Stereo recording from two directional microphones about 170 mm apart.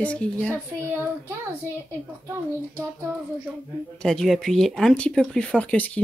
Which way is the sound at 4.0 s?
Centre (ahead or behind).